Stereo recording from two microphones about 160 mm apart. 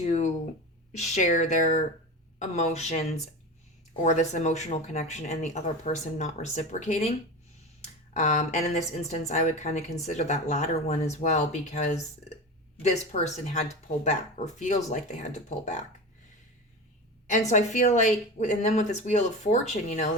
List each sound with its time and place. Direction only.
0.0 s a sound: 45° left (ahead or behind)
0.9 s a woman's voice: 50° left (ahead or behind)
13.1 s a woman's voice: 45° left (ahead or behind)
17.5 s a woman's voice: 50° left (ahead or behind)